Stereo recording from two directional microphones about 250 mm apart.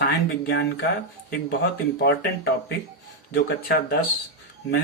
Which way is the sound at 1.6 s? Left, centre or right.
Left.